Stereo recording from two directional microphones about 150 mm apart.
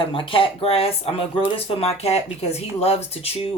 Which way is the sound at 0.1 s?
35° left (ahead or behind).